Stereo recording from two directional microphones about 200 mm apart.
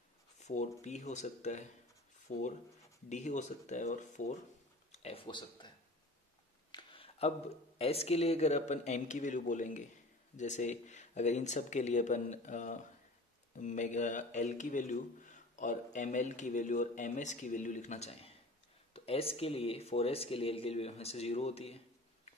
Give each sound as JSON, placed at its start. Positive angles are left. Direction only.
{"t": 0.4, "sound": "speech", "side_deg": 35}
{"t": 6.7, "sound": "speech", "side_deg": 25}